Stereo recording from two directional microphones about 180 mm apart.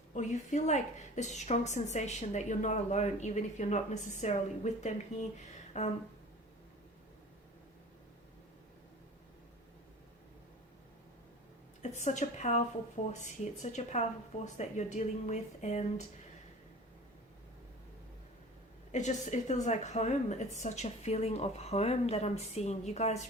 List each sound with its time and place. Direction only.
0.1 s a woman's voice: 40° left (ahead or behind)
11.8 s a woman's voice: 40° left (ahead or behind)
18.9 s a woman's voice: 40° left (ahead or behind)